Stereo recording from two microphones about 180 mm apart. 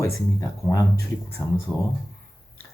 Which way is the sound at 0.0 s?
15° left (ahead or behind).